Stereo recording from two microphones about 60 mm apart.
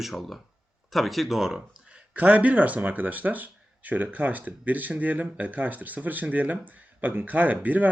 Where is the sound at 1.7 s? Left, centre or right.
Centre.